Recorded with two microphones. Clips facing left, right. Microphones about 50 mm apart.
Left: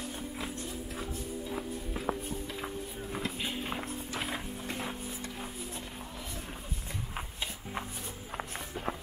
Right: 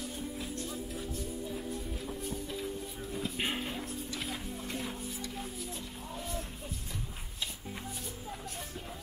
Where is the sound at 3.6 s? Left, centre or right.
Left.